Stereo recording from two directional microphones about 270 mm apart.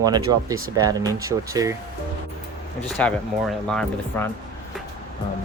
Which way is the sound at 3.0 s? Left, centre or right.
Centre.